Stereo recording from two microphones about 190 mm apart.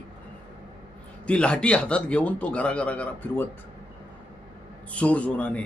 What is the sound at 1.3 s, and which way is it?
Speech, 5° left (ahead or behind).